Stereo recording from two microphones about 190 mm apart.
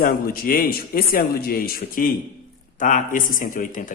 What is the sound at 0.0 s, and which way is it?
A man's voice, 50° left (ahead or behind).